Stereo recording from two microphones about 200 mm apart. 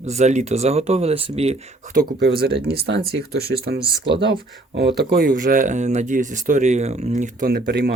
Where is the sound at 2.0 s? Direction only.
50° right (ahead or behind).